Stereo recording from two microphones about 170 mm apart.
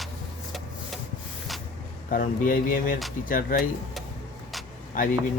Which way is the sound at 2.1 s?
50° left (ahead or behind).